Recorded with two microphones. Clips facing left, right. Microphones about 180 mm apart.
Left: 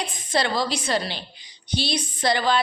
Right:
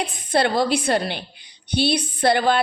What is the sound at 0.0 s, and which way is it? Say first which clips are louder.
A woman's voice: right 4 dB; 55° right (ahead or behind).